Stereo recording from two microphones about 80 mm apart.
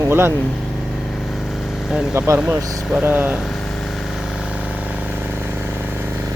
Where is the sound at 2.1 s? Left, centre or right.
Right.